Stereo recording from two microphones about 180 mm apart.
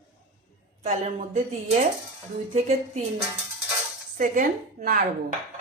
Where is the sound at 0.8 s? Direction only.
40° right (ahead or behind).